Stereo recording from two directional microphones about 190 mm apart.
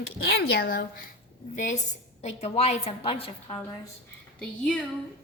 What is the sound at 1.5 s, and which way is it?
A woman's voice, 40° left (ahead or behind).